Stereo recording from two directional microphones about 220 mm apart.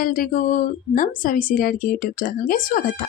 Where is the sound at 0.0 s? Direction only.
40° left (ahead or behind).